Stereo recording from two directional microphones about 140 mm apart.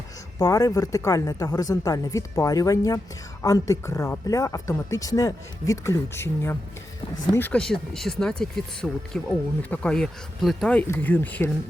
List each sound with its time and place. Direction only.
0.3 s speech: 25° left (ahead or behind)
7.6 s speech: 5° left (ahead or behind)